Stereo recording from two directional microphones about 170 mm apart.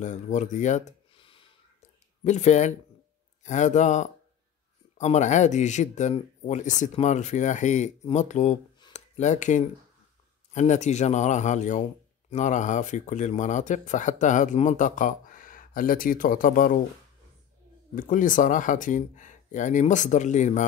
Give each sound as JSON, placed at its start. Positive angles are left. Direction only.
{"t": 0.0, "sound": "a sound", "side_deg": 45}
{"t": 3.4, "sound": "speech", "side_deg": 45}
{"t": 17.9, "sound": "speech", "side_deg": 50}